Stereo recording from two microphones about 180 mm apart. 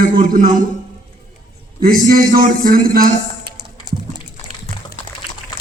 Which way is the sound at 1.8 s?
55° right (ahead or behind).